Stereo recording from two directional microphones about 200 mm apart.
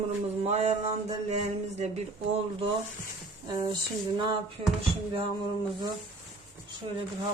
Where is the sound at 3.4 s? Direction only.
20° right (ahead or behind).